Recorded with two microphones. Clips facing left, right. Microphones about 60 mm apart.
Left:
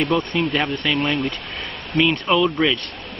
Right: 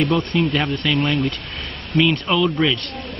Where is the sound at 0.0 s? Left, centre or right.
Centre.